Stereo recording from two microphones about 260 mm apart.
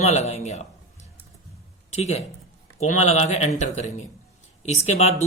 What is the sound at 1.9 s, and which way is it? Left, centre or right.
Speech, left.